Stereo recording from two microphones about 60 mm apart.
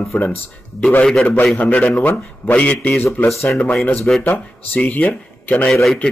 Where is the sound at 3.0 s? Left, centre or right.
Left.